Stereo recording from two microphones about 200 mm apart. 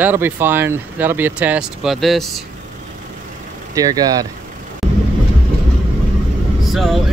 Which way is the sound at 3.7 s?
20° right (ahead or behind).